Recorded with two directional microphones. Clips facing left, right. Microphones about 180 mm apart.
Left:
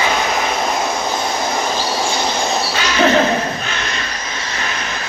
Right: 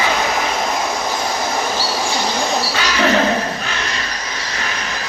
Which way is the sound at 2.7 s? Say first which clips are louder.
Left 4 dB; 25° left (ahead or behind).